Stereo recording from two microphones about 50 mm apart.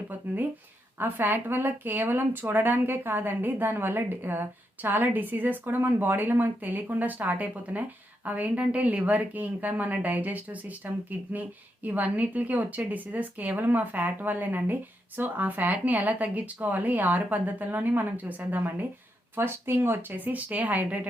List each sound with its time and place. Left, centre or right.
0.9 s speech: right
19.4 s speech: right